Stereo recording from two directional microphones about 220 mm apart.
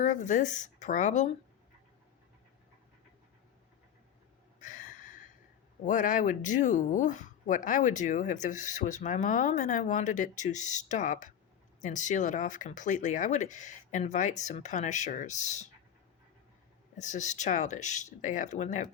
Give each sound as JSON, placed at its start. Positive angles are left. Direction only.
{"t": 0.0, "sound": "speech", "side_deg": 35}
{"t": 4.6, "sound": "a sound", "side_deg": 35}
{"t": 5.8, "sound": "speech", "side_deg": 35}
{"t": 17.0, "sound": "speech", "side_deg": 35}